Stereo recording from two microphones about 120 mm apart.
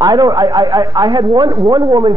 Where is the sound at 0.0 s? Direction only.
35° right (ahead or behind).